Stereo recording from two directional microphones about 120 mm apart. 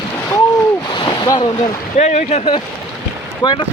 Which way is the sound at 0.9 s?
40° left (ahead or behind).